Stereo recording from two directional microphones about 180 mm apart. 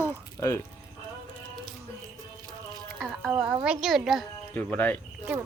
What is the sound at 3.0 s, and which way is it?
A woman's voice, centre (ahead or behind).